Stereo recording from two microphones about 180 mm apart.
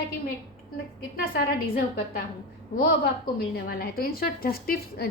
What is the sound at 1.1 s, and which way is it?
Speech, 55° left (ahead or behind).